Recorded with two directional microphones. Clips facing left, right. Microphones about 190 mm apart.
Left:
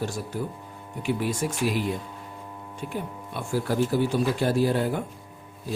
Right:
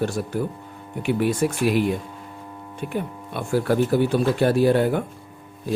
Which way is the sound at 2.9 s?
65° right (ahead or behind).